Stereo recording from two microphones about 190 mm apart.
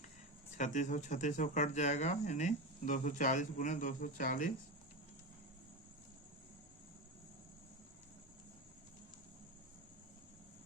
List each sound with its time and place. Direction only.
0.5 s speech: 40° left (ahead or behind)